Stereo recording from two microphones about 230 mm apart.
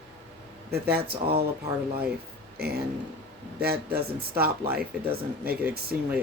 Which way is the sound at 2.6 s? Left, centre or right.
Right.